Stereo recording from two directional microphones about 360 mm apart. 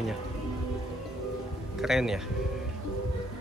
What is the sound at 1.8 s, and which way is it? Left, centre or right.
Speech, centre.